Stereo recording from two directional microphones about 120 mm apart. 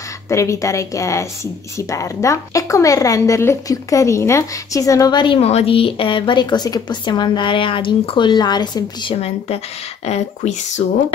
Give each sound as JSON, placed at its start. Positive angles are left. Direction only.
{"t": 0.3, "sound": "speech", "side_deg": 25}
{"t": 5.4, "sound": "speech", "side_deg": 60}
{"t": 9.1, "sound": "speech", "side_deg": 60}